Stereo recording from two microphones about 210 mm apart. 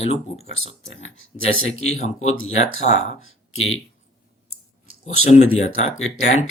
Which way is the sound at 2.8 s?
35° left (ahead or behind).